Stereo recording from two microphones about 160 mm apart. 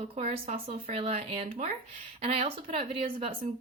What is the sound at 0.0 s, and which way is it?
Speech, 45° right (ahead or behind).